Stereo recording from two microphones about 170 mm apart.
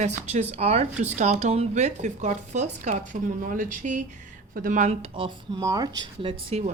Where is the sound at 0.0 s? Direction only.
40° right (ahead or behind).